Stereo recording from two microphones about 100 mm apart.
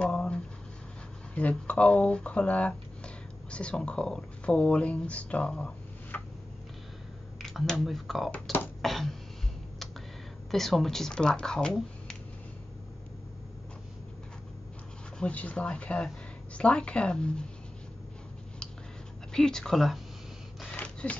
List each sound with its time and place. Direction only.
0.0 s writing: 10° left (ahead or behind)
1.3 s speech: 15° left (ahead or behind)
6.1 s a sound: 20° left (ahead or behind)
7.3 s speech: 5° left (ahead or behind)
8.3 s speech: 15° left (ahead or behind)
8.8 s a sound: centre (ahead or behind)
10.5 s speech: centre (ahead or behind)
15.1 s speech: 10° left (ahead or behind)
19.3 s speech: 5° left (ahead or behind)
20.7 s a sound: 10° left (ahead or behind)